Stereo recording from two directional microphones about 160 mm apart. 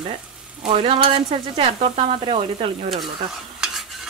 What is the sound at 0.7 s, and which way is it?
Speech, 40° right (ahead or behind).